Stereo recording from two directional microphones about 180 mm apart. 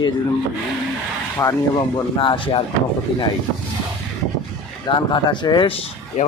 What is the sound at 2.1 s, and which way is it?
Speech, 30° left (ahead or behind).